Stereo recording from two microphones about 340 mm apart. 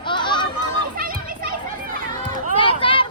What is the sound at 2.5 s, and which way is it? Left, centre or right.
Run, centre.